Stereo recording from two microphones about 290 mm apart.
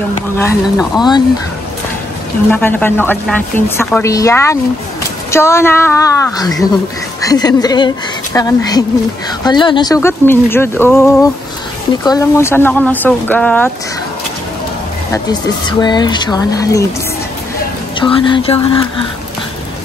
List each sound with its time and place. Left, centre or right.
0.4 s speech: centre
2.5 s a woman's voice: centre
15.1 s a woman's voice: centre
17.9 s a woman's voice: centre